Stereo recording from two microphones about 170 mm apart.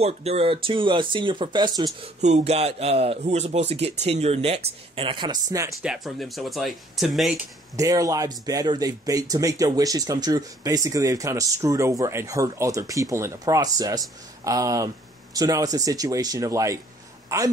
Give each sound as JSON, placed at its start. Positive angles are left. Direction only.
{"t": 0.0, "sound": "speech", "side_deg": -40}
{"t": 2.2, "sound": "speech", "side_deg": -40}
{"t": 5.8, "sound": "speech", "side_deg": -5}
{"t": 7.7, "sound": "a woman's voice", "side_deg": -20}